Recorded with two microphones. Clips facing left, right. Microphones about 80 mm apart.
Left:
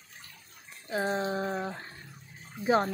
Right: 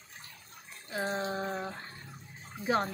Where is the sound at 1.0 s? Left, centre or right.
Centre.